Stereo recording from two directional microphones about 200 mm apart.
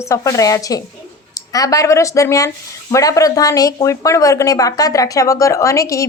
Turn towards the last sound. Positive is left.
turn(degrees=15)  # may be behind; listen again after turning